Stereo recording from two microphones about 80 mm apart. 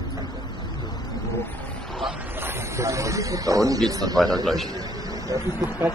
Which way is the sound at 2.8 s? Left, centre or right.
Right.